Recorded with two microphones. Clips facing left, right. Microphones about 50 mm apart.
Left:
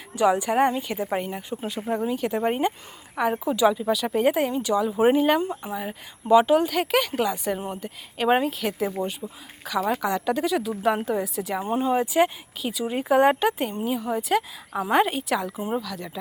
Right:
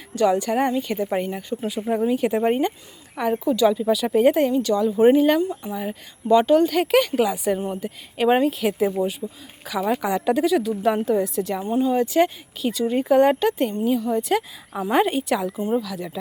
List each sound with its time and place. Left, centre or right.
0.1 s a woman's voice: centre
2.5 s speech: centre
3.8 s a woman's voice: centre
5.4 s speech: left
5.7 s a woman's voice: centre
10.4 s a woman's voice: centre
11.6 s speech: left
12.0 s a woman's voice: centre
15.5 s speech: centre
15.8 s a woman's voice: centre